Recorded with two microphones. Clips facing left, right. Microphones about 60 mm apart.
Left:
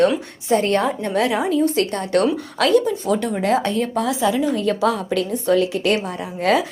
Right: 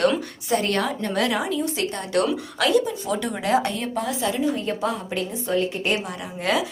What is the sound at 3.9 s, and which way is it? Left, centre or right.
A woman's voice, left.